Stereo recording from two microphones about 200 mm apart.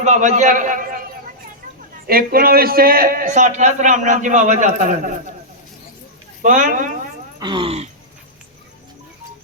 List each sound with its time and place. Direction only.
0.0 s a man's voice: 40° right (ahead or behind)
2.0 s a man's voice: 45° right (ahead or behind)
6.4 s a man's voice: 40° right (ahead or behind)
7.3 s speech: 25° right (ahead or behind)